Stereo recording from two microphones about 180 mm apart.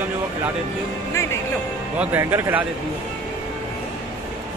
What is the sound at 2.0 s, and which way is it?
Speech, 10° right (ahead or behind).